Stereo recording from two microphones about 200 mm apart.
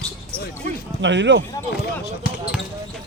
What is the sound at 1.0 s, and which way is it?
Speech, 65° right (ahead or behind).